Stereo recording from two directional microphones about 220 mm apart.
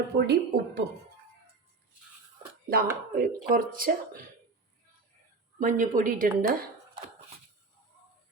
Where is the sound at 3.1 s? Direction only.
40° right (ahead or behind).